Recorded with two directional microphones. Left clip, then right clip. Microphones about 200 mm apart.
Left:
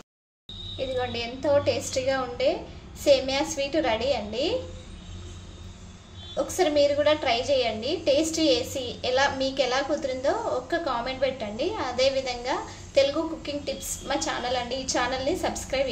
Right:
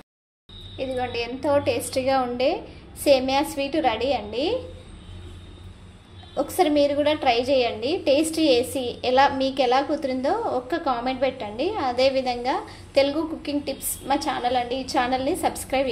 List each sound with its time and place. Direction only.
0.7 s a woman's voice: 10° right (ahead or behind)
6.3 s a woman's voice: 15° right (ahead or behind)